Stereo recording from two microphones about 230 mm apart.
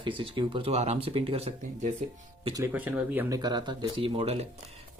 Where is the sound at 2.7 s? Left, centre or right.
Centre; by 4.4 s right.